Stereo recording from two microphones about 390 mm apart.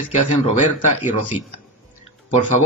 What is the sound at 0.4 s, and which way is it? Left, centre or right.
Speech, centre.